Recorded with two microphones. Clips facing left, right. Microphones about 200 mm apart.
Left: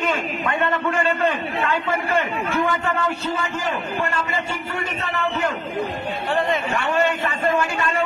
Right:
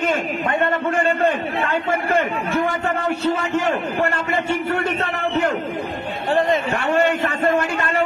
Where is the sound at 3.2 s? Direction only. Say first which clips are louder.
Right 6 dB; 70° right (ahead or behind).